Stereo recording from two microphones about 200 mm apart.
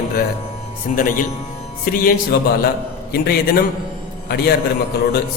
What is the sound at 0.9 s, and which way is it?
Speech, 40° left (ahead or behind).